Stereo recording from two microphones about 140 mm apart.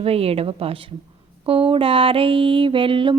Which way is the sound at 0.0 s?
45° right (ahead or behind).